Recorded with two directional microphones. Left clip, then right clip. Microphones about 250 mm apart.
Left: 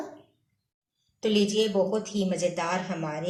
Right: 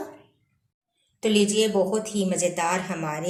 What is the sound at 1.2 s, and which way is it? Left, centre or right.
A woman's voice, centre.